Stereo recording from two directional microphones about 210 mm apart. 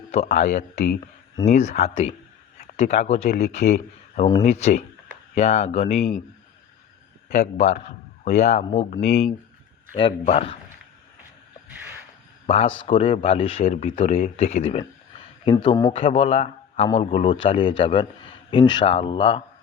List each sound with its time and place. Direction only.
0.3 s speech: 35° left (ahead or behind)
7.3 s speech: 35° left (ahead or behind)
12.5 s speech: 30° left (ahead or behind)